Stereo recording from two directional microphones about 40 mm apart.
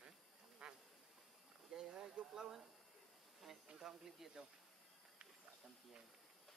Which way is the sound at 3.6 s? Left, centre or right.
Centre.